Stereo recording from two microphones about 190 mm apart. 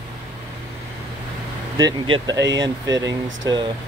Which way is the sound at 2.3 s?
65° right (ahead or behind).